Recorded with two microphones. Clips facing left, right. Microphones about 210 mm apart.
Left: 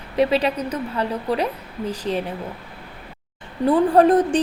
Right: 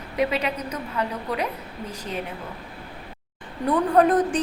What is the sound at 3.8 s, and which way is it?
Speech, 30° left (ahead or behind).